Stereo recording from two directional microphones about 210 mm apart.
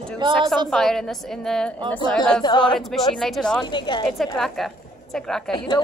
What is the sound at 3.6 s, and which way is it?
Speech, 20° left (ahead or behind).